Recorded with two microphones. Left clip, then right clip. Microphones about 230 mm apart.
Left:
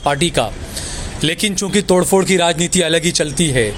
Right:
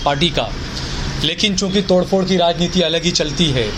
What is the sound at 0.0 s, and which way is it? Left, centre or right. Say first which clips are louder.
Speech: left 1 dB; left.